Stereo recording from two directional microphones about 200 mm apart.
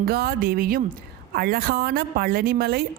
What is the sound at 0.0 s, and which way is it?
A woman's voice, 50° right (ahead or behind).